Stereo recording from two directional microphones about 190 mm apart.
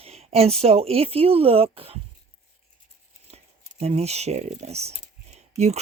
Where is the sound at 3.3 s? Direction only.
35° right (ahead or behind).